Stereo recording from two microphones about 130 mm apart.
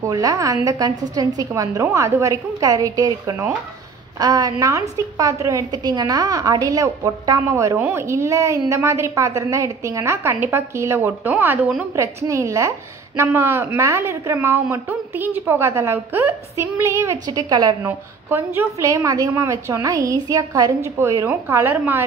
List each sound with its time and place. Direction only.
0.0 s a woman's voice: 30° right (ahead or behind)
17.8 s a woman's voice: 15° right (ahead or behind)
18.9 s a woman's voice: 25° right (ahead or behind)